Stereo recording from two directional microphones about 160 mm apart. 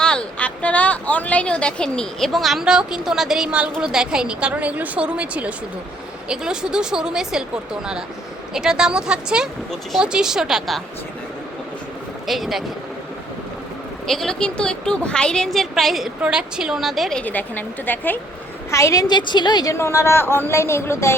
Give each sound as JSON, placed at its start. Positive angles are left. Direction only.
{"t": 0.0, "sound": "speech", "side_deg": 5}
{"t": 12.2, "sound": "speech", "side_deg": 0}
{"t": 14.1, "sound": "a woman's voice", "side_deg": 0}